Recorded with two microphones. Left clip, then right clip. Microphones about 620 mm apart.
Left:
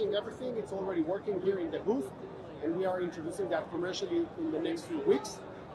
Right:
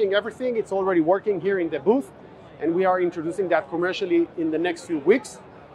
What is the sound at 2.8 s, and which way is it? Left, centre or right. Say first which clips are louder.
Speech: right 14 dB; right.